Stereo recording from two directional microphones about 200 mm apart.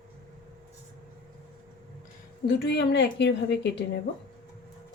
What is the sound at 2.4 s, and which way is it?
A woman's voice, 55° left (ahead or behind).